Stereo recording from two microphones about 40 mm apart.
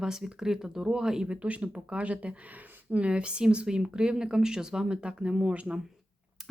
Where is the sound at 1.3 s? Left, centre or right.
Right; by 4.9 s centre.